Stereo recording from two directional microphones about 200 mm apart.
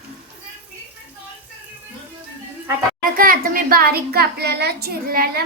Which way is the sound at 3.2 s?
45° right (ahead or behind).